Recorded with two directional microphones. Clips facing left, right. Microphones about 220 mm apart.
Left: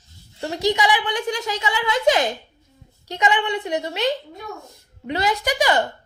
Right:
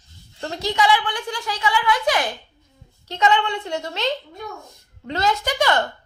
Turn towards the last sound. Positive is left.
turn(degrees=15)  # may be behind; listen again after turning